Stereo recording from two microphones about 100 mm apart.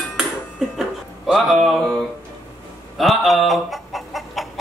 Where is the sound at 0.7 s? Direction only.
Centre (ahead or behind).